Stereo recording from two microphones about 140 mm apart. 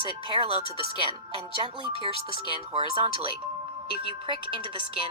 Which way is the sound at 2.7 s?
40° right (ahead or behind).